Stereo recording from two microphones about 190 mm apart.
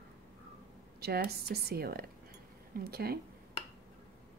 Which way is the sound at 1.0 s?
55° right (ahead or behind).